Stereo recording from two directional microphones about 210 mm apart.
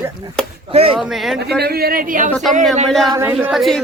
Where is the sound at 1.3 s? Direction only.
50° right (ahead or behind).